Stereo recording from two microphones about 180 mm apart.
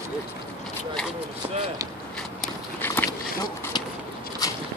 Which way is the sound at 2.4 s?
10° left (ahead or behind).